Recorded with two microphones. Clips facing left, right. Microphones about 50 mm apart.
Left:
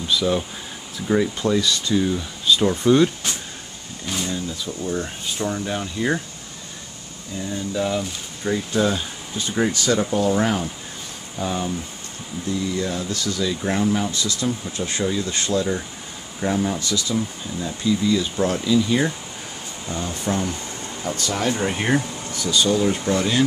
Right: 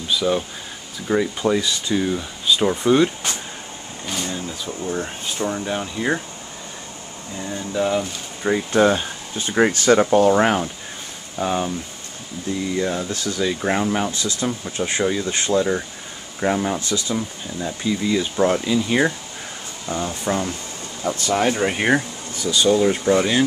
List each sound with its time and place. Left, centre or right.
0.1 s speech: centre
1.5 s speech: centre
4.5 s speech: centre
7.3 s speech: centre; by 10.6 s right
11.3 s speech: centre